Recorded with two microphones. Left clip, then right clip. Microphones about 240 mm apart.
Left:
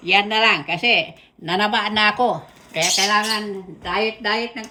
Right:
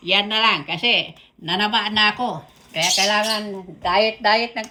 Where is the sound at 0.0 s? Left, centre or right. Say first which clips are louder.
Left 2 dB; centre.